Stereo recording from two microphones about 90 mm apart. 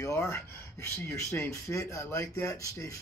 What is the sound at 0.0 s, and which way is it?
Speech, 35° left (ahead or behind).